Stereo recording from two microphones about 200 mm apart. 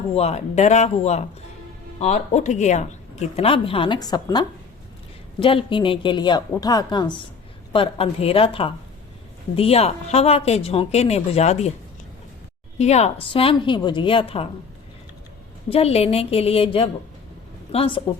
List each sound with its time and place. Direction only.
0.1 s a woman's voice: 30° left (ahead or behind)
12.8 s a woman's voice: 35° left (ahead or behind)
15.7 s a woman's voice: 30° left (ahead or behind)